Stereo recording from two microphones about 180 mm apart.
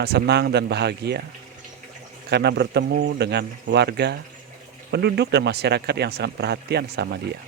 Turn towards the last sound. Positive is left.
turn(degrees=-65)  # may be behind; listen again after turning